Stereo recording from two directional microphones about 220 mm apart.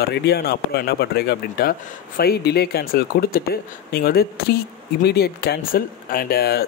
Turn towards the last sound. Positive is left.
turn(degrees=45)  # may be behind; listen again after turning